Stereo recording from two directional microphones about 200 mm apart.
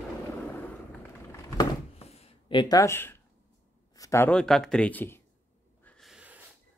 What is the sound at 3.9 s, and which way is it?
Speech, 15° left (ahead or behind).